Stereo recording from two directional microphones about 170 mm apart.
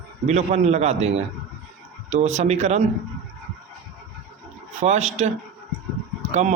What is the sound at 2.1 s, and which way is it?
Speech, 40° right (ahead or behind).